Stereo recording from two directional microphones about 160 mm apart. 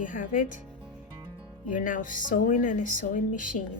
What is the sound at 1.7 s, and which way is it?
Speech, 55° left (ahead or behind).